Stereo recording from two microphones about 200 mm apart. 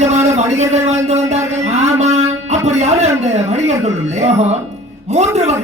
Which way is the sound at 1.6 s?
35° right (ahead or behind).